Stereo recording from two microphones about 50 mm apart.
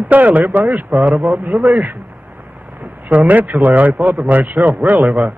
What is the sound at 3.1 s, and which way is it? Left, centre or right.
A man's voice, right.